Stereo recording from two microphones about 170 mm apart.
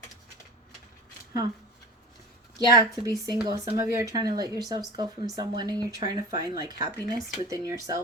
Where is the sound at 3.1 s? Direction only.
20° right (ahead or behind).